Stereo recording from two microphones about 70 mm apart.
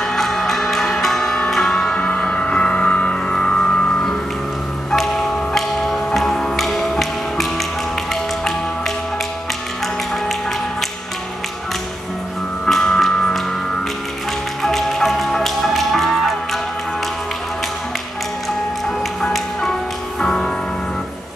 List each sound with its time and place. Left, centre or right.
0.0 s music: centre
12.6 s music: centre
14.6 s music: centre
18.9 s music: centre